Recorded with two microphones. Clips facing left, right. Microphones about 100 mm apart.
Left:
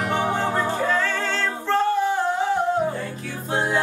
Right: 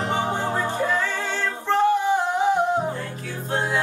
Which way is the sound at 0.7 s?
15° right (ahead or behind).